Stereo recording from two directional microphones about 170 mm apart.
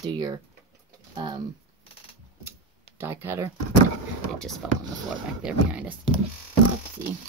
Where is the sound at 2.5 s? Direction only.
15° right (ahead or behind).